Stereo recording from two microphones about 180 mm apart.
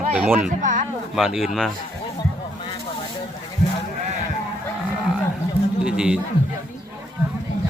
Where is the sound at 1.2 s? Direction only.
Centre (ahead or behind).